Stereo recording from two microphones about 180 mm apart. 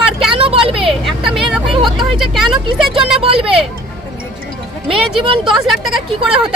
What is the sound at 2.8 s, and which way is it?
Speech, 30° right (ahead or behind).